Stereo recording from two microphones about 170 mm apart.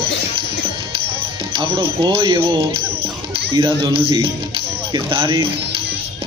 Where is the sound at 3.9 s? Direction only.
30° right (ahead or behind).